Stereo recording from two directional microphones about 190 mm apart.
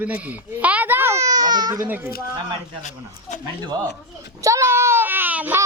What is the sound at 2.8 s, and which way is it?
Speech, 40° left (ahead or behind).